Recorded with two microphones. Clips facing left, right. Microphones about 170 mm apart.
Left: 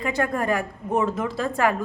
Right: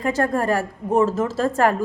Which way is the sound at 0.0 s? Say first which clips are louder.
Right 4 dB; 40° right (ahead or behind).